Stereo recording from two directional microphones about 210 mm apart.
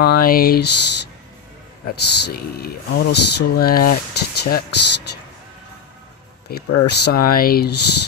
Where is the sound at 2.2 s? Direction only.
45° left (ahead or behind).